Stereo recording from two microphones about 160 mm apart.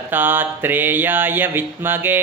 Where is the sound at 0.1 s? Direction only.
10° right (ahead or behind).